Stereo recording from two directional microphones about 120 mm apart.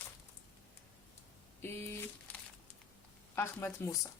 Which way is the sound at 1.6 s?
20° left (ahead or behind).